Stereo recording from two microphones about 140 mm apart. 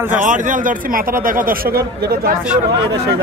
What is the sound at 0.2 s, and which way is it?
Speech, 65° right (ahead or behind).